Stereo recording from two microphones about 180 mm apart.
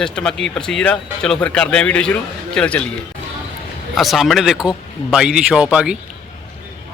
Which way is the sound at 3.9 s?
Centre (ahead or behind).